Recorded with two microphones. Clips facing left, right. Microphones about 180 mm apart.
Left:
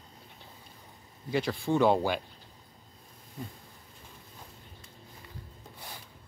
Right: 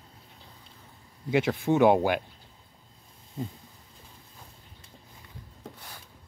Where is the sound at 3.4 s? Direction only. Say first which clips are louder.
Right 6 dB; 25° right (ahead or behind).